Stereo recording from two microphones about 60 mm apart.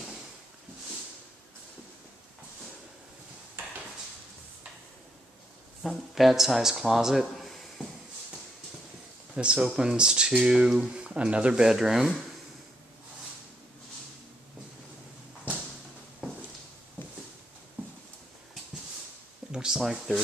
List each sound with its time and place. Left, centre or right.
5.8 s a man's voice: centre
9.3 s speech: centre
11.6 s a man's voice: centre
19.5 s a sound: centre